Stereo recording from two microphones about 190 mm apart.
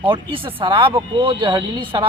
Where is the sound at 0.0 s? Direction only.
25° right (ahead or behind).